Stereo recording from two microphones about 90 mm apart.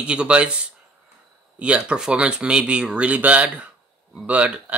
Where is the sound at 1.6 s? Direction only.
10° right (ahead or behind).